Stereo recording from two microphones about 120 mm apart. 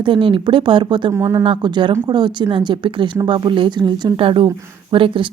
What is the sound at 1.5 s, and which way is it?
Speech, 40° right (ahead or behind).